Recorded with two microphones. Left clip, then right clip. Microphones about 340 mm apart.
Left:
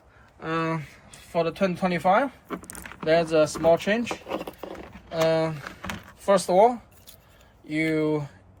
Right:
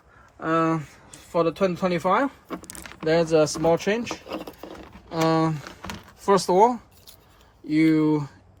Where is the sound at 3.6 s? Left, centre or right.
Right.